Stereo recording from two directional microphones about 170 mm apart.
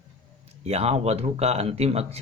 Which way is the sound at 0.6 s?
40° right (ahead or behind).